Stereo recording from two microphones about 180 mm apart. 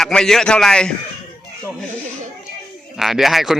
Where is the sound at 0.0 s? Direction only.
5° left (ahead or behind).